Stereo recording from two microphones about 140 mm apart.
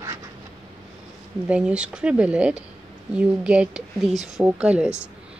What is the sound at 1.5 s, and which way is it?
Speech, 5° right (ahead or behind).